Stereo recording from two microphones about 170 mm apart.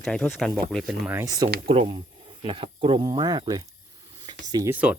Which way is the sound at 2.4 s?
30° right (ahead or behind).